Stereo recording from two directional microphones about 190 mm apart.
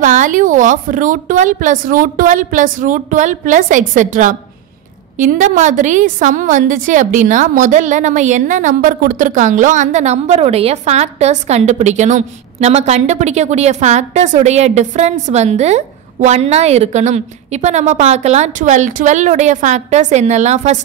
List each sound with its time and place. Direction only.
0.0 s a woman's voice: 45° right (ahead or behind)